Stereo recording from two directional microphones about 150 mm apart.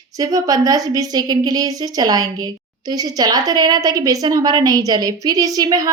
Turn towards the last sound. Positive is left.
turn(degrees=-25)  # may be behind; listen again after turning